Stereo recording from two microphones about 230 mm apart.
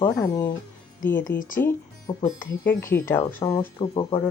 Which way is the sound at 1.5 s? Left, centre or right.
Centre.